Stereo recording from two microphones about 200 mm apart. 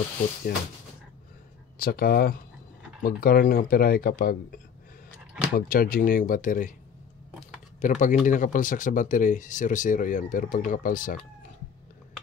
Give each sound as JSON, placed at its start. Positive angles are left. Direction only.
{"t": 1.8, "sound": "speech", "side_deg": 50}
{"t": 7.8, "sound": "speech", "side_deg": 40}